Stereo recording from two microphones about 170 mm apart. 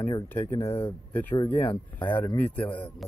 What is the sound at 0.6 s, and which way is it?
Speech, 35° left (ahead or behind).